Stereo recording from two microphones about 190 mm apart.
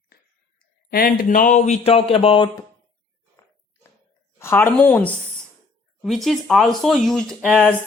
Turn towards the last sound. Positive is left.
turn(degrees=10)  # may be behind; listen again after turning